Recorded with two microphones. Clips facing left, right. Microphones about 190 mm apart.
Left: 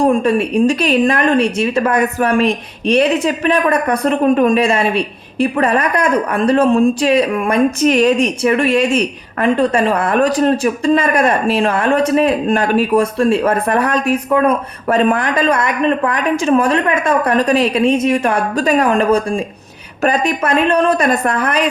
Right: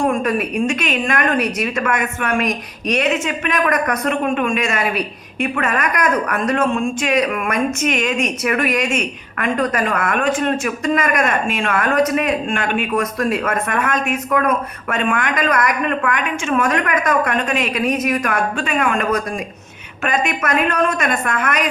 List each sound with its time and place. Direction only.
0.0 s a woman's voice: 30° left (ahead or behind)